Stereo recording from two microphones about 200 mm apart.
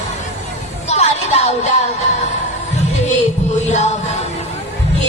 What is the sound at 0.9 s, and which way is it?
Music, 35° left (ahead or behind).